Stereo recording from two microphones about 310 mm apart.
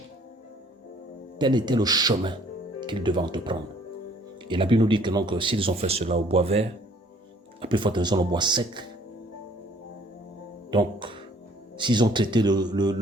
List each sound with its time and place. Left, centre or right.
1.4 s speech: centre
10.7 s speech: centre